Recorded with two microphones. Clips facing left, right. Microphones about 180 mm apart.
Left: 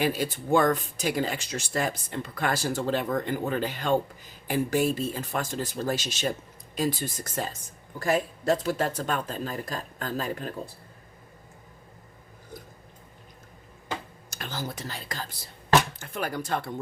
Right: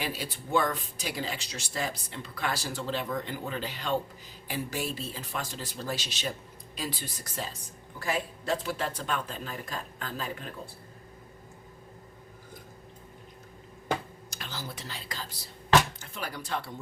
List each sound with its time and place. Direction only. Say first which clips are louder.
0.0 s speech: left 8 dB; 50° left (ahead or behind)
14.3 s speech: left 7 dB; 50° left (ahead or behind)